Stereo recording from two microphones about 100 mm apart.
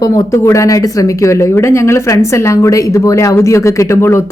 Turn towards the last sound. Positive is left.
turn(degrees=30)  # may be behind; listen again after turning